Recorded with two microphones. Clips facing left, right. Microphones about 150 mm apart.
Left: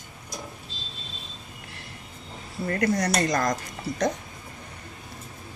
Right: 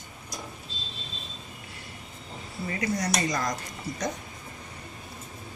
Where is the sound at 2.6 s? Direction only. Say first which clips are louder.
Left 5 dB; 55° left (ahead or behind).